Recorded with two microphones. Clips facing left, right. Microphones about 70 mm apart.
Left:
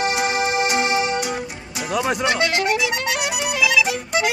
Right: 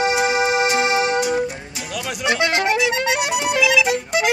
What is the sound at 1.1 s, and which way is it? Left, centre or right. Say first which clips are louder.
Music: right 5 dB; right.